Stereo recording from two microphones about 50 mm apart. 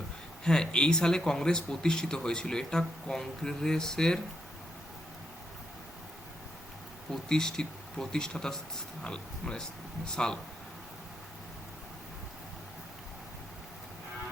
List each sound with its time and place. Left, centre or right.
0.4 s a man's voice: centre
7.1 s a man's voice: centre